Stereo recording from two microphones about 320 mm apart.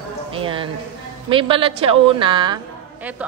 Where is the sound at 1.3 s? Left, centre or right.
Centre.